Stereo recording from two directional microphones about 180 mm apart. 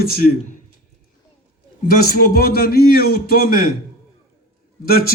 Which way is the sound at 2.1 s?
55° left (ahead or behind).